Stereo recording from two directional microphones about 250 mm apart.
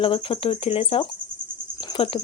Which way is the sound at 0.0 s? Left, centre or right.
Left.